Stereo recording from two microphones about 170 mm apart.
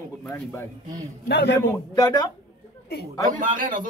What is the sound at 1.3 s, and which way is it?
Speech, 80° left.